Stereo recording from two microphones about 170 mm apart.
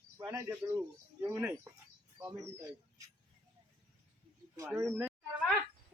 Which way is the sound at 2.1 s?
15° right (ahead or behind).